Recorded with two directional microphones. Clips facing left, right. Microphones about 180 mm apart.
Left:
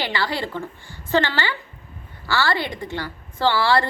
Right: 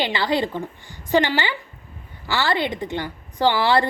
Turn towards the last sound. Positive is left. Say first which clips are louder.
# right 1 dB
turn(degrees=-20)  # may be behind; listen again after turning